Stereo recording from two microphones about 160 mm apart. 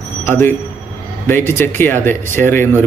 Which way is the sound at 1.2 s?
15° left (ahead or behind).